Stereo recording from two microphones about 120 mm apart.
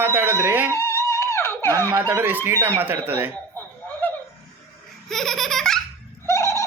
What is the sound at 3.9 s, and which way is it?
Snicker, 15° left (ahead or behind).